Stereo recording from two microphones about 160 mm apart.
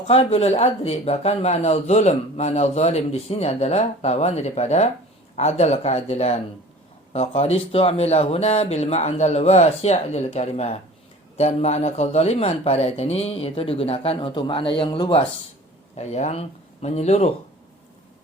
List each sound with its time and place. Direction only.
0.1 s speech: 40° left (ahead or behind)
16.0 s speech: 45° left (ahead or behind)